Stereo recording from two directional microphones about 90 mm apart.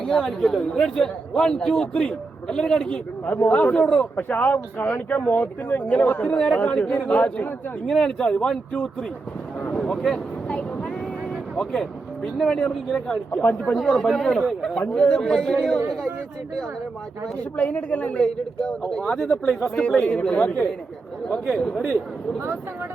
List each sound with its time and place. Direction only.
0.0 s a man's voice: 5° left (ahead or behind)
3.2 s speech: 25° left (ahead or behind)
3.5 s a man's voice: 15° left (ahead or behind)
4.2 s a man's voice: 20° left (ahead or behind)
9.7 s a sound: 10° left (ahead or behind)
11.5 s a man's voice: 10° left (ahead or behind)
13.7 s a man's voice: 5° left (ahead or behind)
17.6 s a man's voice: 15° left (ahead or behind)